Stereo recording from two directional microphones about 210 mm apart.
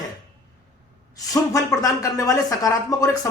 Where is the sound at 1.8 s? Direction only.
15° left (ahead or behind).